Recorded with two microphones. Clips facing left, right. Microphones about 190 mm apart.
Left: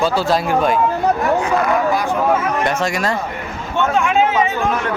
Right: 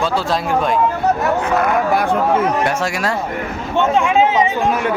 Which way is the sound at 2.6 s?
5° right (ahead or behind).